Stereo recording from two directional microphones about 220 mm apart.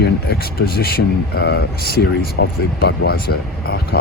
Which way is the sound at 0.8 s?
45° left (ahead or behind).